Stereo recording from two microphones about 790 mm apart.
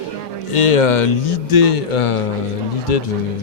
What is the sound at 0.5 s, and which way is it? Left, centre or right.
Speech, left.